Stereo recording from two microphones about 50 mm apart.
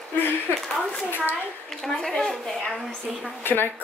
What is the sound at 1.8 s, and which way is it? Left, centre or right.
Speech, centre.